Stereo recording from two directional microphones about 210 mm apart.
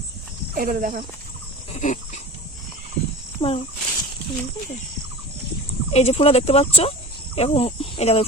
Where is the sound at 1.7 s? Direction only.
35° left (ahead or behind).